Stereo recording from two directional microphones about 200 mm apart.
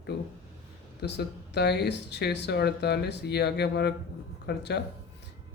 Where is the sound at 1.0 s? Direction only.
60° left (ahead or behind).